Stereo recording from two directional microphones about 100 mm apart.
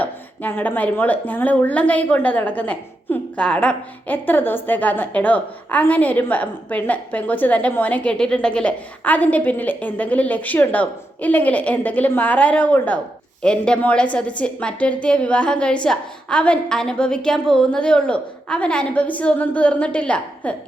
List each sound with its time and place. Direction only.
0.0 s speech: 20° left (ahead or behind)